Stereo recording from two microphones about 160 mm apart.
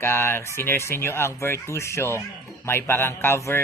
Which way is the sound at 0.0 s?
15° left (ahead or behind).